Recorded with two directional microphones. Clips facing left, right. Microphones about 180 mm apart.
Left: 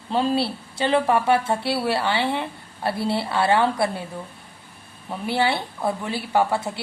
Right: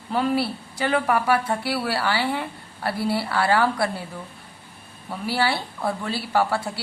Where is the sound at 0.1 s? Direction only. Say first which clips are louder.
Left 1 dB; 25° left (ahead or behind).